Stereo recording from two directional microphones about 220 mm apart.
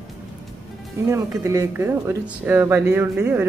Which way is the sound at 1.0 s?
15° right (ahead or behind).